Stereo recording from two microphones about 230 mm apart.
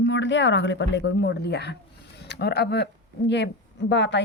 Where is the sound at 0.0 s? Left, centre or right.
Left.